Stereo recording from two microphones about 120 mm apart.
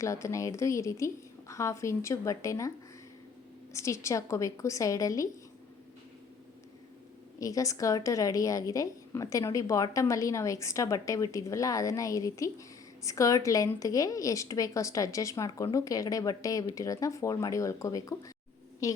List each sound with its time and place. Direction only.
0.0 s a woman's voice: 25° left (ahead or behind)
7.3 s a woman's voice: 30° left (ahead or behind)